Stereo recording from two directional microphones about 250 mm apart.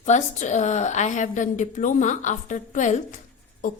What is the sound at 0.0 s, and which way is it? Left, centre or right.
A woman's voice, left.